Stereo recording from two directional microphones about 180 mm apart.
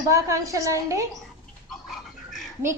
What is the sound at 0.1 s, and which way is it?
Speech, 20° right (ahead or behind).